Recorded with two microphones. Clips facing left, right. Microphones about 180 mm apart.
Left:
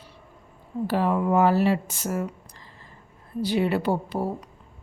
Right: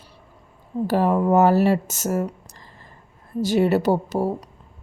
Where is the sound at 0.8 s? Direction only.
45° right (ahead or behind).